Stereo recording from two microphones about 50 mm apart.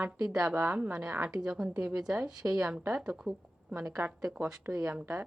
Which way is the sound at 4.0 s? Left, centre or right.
Right.